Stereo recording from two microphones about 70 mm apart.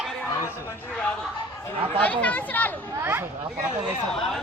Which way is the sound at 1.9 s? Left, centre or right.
Centre.